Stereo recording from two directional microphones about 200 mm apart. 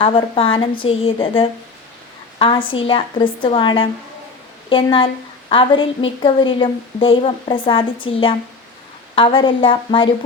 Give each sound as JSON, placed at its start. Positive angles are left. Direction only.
{"t": 0.0, "sound": "a woman's voice", "side_deg": 25}